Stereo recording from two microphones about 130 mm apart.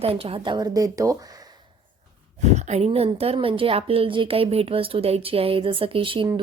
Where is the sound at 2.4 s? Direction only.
60° right (ahead or behind).